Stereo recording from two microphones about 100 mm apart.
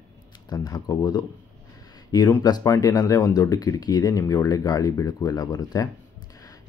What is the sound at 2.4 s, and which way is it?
Speech, 35° left (ahead or behind).